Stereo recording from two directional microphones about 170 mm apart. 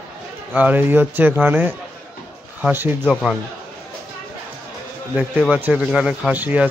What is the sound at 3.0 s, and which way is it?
Speech, 5° left (ahead or behind).